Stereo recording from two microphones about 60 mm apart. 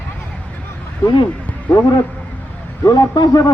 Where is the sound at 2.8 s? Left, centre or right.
Left.